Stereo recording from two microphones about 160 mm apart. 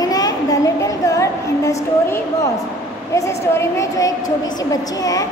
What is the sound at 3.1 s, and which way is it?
A woman's voice, 20° left (ahead or behind).